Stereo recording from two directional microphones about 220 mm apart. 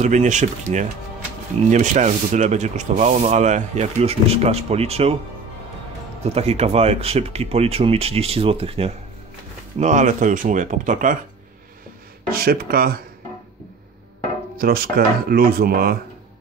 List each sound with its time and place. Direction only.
0.0 s speech: 35° right (ahead or behind)
6.2 s speech: 30° right (ahead or behind)
12.3 s speech: 45° right (ahead or behind)
14.6 s speech: 45° right (ahead or behind)